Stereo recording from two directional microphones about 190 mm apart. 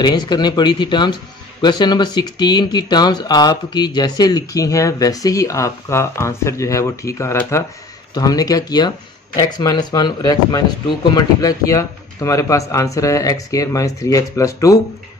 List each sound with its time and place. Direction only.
0.0 s speech: 20° left (ahead or behind)